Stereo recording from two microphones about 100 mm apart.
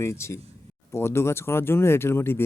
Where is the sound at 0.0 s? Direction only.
25° left (ahead or behind).